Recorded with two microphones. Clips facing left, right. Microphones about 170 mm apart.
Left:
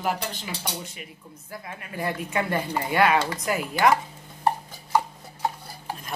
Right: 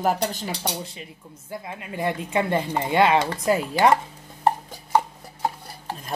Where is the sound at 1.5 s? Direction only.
20° right (ahead or behind).